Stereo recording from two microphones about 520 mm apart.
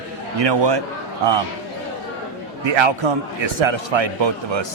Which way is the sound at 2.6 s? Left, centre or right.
Right.